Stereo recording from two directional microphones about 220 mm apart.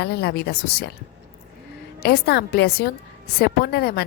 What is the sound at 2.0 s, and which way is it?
A woman's voice, 45° left (ahead or behind).